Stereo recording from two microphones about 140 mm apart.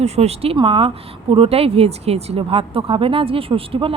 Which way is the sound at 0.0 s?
50° right (ahead or behind).